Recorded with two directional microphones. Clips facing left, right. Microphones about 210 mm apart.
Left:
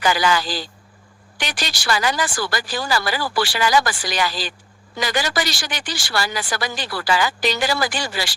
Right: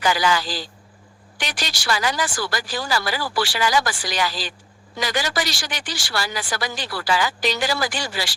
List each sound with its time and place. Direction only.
0.0 s speech: 60° left (ahead or behind)